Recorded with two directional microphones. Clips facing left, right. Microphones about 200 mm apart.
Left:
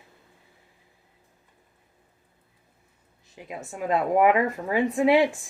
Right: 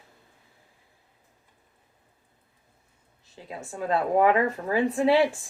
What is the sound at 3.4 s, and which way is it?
Speech, 15° left (ahead or behind).